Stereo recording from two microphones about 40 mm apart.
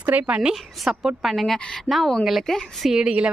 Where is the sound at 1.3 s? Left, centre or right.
Centre.